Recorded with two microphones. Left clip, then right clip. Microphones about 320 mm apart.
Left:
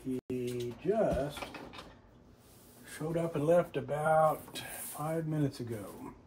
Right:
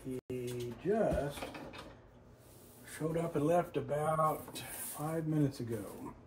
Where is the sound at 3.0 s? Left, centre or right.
Centre.